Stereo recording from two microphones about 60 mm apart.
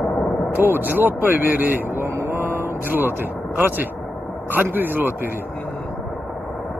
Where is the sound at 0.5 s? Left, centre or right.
Right.